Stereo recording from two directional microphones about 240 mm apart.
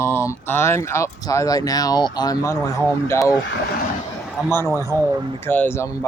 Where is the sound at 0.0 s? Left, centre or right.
Centre.